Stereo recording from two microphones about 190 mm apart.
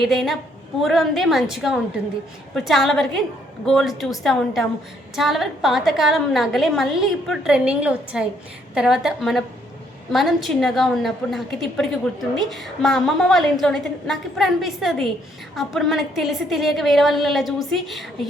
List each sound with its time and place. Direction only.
0.0 s a woman's voice: centre (ahead or behind)